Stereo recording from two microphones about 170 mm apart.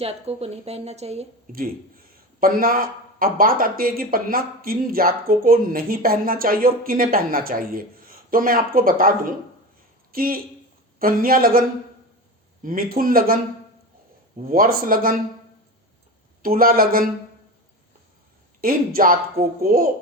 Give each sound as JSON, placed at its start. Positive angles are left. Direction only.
{"t": 0.0, "sound": "a woman's voice", "side_deg": -35}
{"t": 1.5, "sound": "speech", "side_deg": -55}
{"t": 12.6, "sound": "speech", "side_deg": -55}
{"t": 16.4, "sound": "speech", "side_deg": -60}
{"t": 18.6, "sound": "speech", "side_deg": -60}